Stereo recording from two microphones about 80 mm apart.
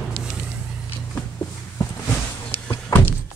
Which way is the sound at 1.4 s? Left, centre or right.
Left.